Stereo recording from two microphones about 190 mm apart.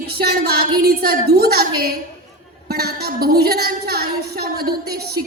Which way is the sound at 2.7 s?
55° right (ahead or behind).